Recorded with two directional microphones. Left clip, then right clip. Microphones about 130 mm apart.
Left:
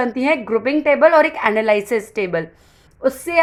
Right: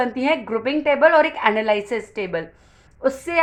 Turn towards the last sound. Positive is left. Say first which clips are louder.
# left 2 dB
turn(degrees=25)  # may be behind; listen again after turning